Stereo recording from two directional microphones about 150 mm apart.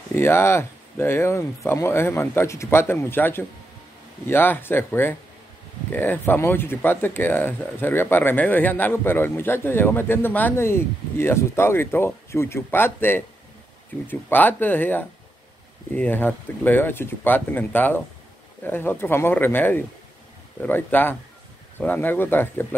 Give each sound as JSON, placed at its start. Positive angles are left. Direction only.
{"t": 0.1, "sound": "speech", "side_deg": 15}